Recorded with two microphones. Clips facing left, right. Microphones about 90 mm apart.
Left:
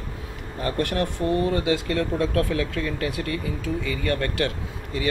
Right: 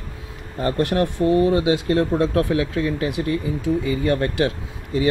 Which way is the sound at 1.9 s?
30° right (ahead or behind).